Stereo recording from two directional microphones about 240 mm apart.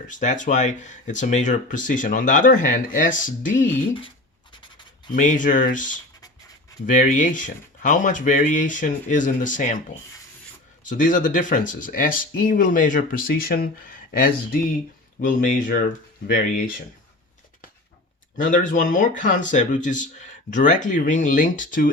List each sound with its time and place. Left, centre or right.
0.1 s speech: left
4.5 s writing: centre
5.1 s speech: left
10.8 s speech: left
18.3 s speech: left